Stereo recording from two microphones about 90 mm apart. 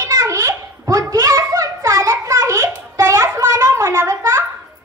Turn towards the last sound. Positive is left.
turn(degrees=-35)  # may be behind; listen again after turning